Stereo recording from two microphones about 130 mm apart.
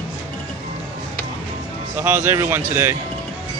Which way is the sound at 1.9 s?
15° right (ahead or behind).